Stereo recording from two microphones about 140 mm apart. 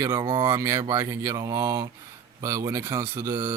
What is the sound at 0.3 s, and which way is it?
Speech, 35° right (ahead or behind).